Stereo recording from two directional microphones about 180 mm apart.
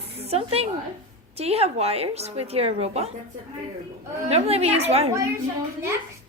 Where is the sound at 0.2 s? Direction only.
35° right (ahead or behind).